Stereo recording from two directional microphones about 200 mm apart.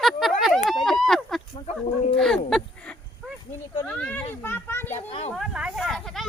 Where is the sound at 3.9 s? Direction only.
5° left (ahead or behind).